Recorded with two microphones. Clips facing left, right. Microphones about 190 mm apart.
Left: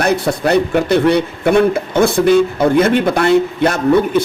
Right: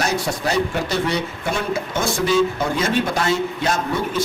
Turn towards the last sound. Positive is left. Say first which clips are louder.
# left 10 dB
turn(degrees=60)  # may be behind; listen again after turning